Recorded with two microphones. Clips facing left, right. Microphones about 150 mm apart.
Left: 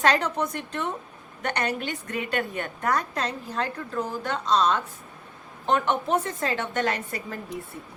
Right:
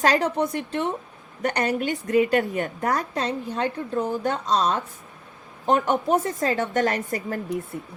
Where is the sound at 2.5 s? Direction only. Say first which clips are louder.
Right 2 dB; 35° right (ahead or behind).